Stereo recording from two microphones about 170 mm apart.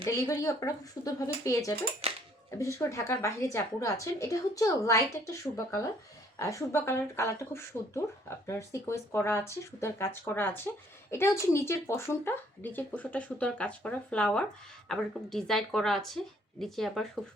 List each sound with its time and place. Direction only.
0.2 s a woman's voice: 15° left (ahead or behind)
2.0 s dishes: 35° right (ahead or behind)
2.5 s a woman's voice: 15° left (ahead or behind); by 17.1 s centre (ahead or behind)